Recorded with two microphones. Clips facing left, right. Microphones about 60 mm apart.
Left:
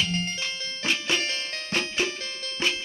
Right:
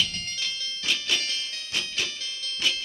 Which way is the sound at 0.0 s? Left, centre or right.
Left.